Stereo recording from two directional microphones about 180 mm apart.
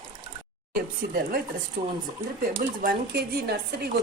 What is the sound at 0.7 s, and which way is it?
Speech, 60° right (ahead or behind).